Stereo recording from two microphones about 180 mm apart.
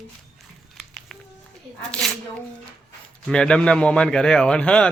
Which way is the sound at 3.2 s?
5° left (ahead or behind).